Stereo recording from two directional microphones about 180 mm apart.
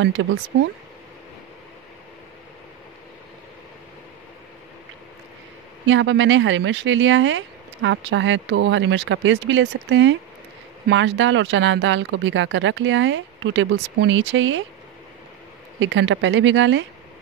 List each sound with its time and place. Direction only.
0.0 s speech: 90° right
5.9 s speech: 90° right
15.8 s speech: 90° right